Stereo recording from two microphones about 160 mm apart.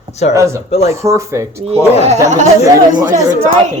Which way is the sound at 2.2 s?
45° right (ahead or behind).